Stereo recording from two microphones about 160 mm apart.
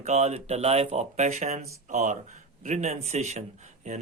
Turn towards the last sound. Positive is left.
turn(degrees=-45)  # may be behind; listen again after turning